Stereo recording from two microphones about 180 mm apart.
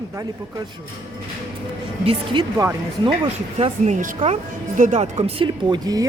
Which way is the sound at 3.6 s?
40° right (ahead or behind).